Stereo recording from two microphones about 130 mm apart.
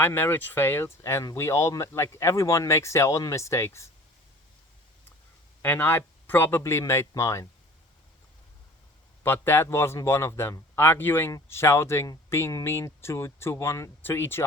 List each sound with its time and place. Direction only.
0.0 s speech: 15° left (ahead or behind)
5.6 s speech: 15° left (ahead or behind)
9.2 s speech: 15° left (ahead or behind)